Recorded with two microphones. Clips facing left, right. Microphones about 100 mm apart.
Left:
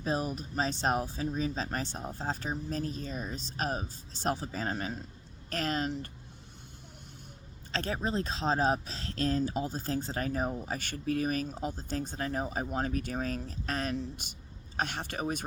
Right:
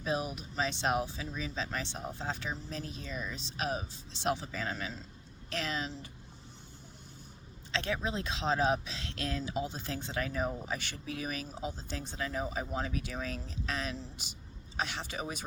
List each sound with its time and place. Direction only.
0.0 s speech: 40° left (ahead or behind)
7.7 s speech: 40° left (ahead or behind)